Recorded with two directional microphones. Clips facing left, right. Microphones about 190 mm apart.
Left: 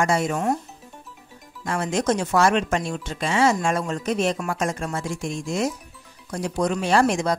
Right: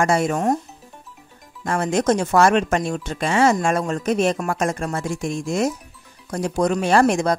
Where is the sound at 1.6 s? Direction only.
50° right (ahead or behind).